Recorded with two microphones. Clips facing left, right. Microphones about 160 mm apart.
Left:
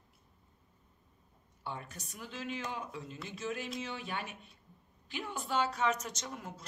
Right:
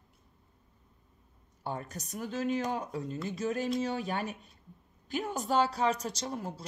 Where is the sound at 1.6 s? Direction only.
40° right (ahead or behind).